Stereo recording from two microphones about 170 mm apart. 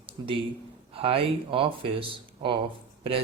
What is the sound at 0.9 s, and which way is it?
Speech, 35° right (ahead or behind).